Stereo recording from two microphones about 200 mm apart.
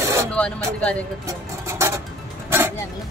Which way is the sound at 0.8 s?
5° left (ahead or behind).